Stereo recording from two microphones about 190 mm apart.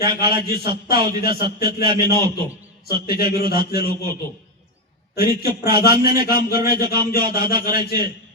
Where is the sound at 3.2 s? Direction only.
55° left (ahead or behind).